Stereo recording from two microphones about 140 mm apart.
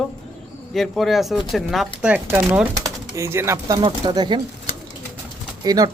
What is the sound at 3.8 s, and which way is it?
Speech, 30° right (ahead or behind).